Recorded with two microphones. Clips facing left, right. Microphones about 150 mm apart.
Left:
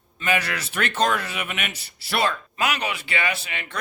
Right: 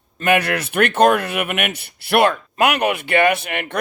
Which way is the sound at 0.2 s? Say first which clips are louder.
Right 7 dB; 55° right (ahead or behind).